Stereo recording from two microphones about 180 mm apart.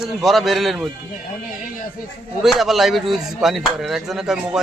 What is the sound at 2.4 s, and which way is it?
Speech, centre (ahead or behind).